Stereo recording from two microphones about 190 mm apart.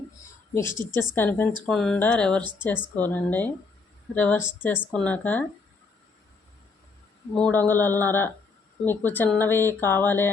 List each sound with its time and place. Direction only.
0.6 s a woman's voice: 25° right (ahead or behind)
1.1 s speech: 10° left (ahead or behind)
2.4 s a woman's voice: 25° right (ahead or behind)
2.9 s speech: 10° left (ahead or behind)
7.3 s speech: 10° left (ahead or behind)